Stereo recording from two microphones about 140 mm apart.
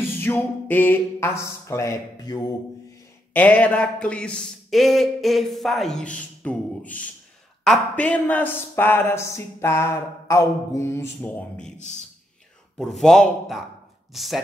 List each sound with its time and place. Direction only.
0.2 s speech: 15° left (ahead or behind); by 2.4 s 30° left (ahead or behind)
3.3 s speech: 10° left (ahead or behind)
11.1 s speech: 10° left (ahead or behind)
12.7 s speech: centre (ahead or behind)